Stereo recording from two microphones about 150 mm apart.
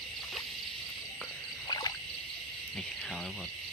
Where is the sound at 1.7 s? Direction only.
25° left (ahead or behind).